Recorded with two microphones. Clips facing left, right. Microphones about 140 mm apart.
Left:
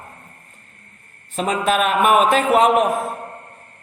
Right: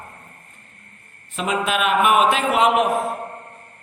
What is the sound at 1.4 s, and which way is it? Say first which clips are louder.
Mantra: left 3 dB; 40° left (ahead or behind).